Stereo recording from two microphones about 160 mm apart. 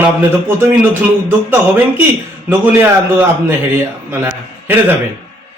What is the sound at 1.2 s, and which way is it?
A man's voice, 10° right (ahead or behind).